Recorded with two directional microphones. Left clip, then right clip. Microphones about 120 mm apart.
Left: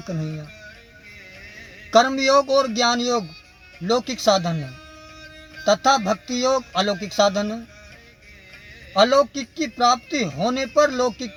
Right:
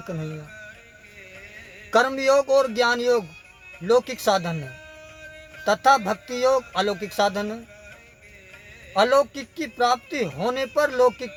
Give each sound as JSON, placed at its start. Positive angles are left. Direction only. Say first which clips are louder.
{"t": 0.0, "sound": "a man's voice", "louder": "left 2 dB", "side_deg": -50}
{"t": 1.9, "sound": "a man's voice", "louder": "left 3 dB", "side_deg": -45}
{"t": 5.6, "sound": "a man's voice", "louder": "left 1 dB", "side_deg": -45}
{"t": 8.9, "sound": "a man's voice", "louder": "left 2 dB", "side_deg": -45}